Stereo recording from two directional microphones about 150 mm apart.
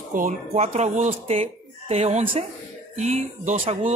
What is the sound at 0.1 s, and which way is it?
Speech, 65° right (ahead or behind).